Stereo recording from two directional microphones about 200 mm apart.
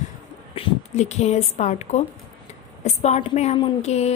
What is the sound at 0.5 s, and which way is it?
A woman's voice, 30° left (ahead or behind).